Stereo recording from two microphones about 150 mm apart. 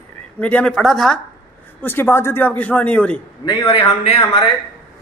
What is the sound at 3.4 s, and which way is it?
Speech, 35° left (ahead or behind).